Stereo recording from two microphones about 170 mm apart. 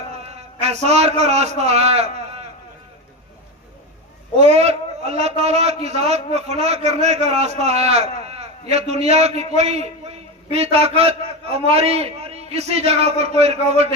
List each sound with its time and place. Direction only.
0.2 s a man's voice: 40° right (ahead or behind)
4.4 s a man's voice: 40° right (ahead or behind)